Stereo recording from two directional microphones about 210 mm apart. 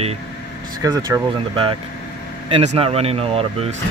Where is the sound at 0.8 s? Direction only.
15° right (ahead or behind).